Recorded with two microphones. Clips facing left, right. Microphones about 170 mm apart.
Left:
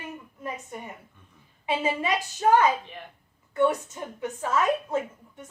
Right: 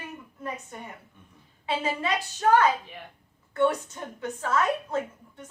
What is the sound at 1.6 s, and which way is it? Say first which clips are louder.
A woman's voice: left 2 dB; 15° left (ahead or behind).